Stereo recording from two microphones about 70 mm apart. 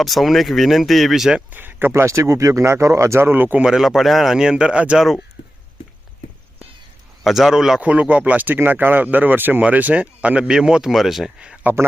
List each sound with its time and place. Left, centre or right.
0.0 s speech: centre
1.5 s speech: right
1.9 s speech: right
3.6 s speech: centre
7.3 s speech: centre
7.8 s speech: centre
11.6 s a man's voice: right